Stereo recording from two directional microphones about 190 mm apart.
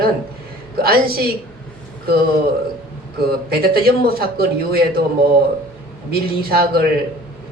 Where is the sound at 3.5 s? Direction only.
55° right (ahead or behind).